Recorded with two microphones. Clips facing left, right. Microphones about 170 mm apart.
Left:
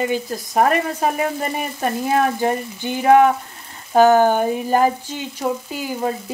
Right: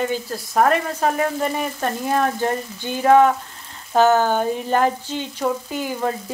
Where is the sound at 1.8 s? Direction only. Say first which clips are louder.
Left 4 dB; 10° left (ahead or behind).